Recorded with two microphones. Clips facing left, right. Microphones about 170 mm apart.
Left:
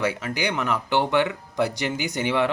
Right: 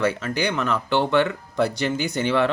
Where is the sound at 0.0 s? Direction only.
15° left (ahead or behind).